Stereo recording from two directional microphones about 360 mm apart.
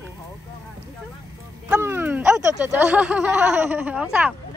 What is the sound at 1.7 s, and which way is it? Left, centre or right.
A woman's voice, centre.